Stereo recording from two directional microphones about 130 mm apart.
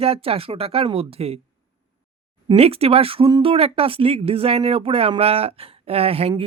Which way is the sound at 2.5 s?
50° right (ahead or behind).